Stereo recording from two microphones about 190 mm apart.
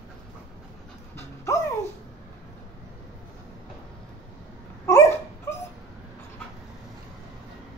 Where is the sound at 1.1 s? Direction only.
15° left (ahead or behind).